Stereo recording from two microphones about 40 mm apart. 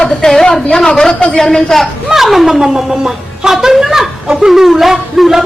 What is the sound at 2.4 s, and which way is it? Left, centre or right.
A woman's voice, centre.